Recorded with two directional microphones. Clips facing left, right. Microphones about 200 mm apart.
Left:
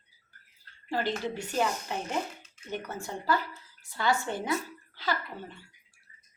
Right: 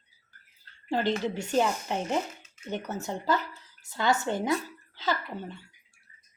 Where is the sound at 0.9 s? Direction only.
25° right (ahead or behind).